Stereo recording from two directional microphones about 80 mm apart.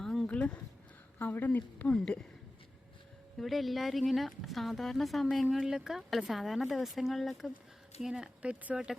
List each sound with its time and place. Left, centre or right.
0.0 s a sound: centre
0.3 s speech: centre
3.3 s speech: centre